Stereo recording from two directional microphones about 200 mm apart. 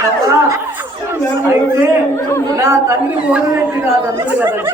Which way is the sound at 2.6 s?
15° right (ahead or behind).